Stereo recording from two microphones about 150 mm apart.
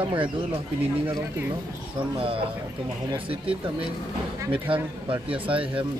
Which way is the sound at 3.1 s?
35° right (ahead or behind).